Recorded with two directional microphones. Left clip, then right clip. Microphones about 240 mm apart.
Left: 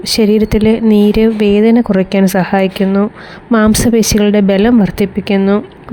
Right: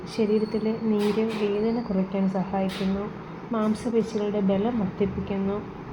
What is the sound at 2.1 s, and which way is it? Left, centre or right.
Speech, left.